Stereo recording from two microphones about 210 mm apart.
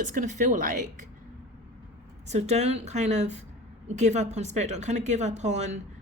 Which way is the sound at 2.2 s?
30° right (ahead or behind).